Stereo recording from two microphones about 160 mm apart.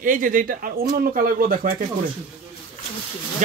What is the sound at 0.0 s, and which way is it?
Speech, 55° right (ahead or behind).